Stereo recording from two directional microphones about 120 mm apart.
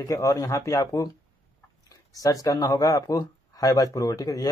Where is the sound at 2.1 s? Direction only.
30° left (ahead or behind).